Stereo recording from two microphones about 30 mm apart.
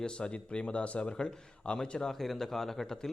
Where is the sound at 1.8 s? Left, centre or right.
Left.